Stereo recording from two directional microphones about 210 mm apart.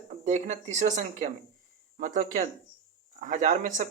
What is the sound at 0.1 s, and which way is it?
Speech, 35° right (ahead or behind).